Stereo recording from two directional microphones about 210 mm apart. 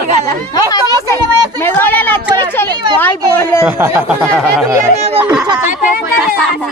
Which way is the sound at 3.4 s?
10° left (ahead or behind).